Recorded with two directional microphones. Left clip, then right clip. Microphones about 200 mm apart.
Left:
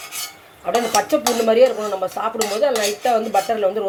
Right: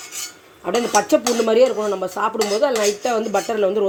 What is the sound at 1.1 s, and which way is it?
Speech, 40° right (ahead or behind).